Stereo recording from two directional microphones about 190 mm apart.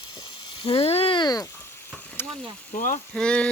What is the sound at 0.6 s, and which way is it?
Speech, 30° left (ahead or behind).